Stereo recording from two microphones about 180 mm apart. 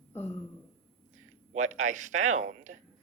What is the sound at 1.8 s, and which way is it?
Speech, 40° right (ahead or behind).